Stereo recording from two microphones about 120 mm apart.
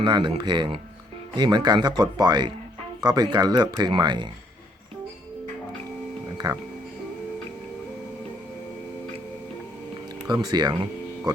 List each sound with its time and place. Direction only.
0.0 s speech: 45° right (ahead or behind)
6.3 s music: 35° right (ahead or behind)
10.2 s speech: 35° right (ahead or behind)